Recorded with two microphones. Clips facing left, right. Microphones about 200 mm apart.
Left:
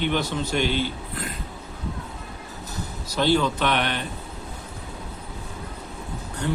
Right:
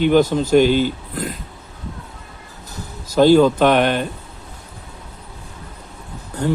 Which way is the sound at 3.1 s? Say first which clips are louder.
Right 10 dB; 45° right (ahead or behind).